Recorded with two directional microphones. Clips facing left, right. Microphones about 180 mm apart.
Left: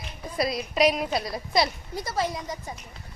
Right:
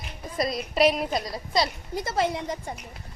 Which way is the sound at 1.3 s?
10° left (ahead or behind).